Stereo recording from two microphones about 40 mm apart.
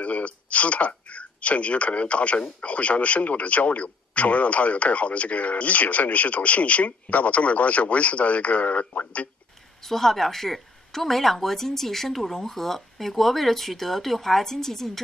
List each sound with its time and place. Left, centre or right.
0.0 s speech: left
9.8 s speech: centre